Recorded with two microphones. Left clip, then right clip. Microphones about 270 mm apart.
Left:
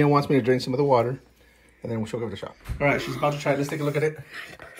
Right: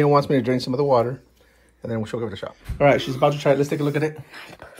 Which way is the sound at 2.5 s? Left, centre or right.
Centre.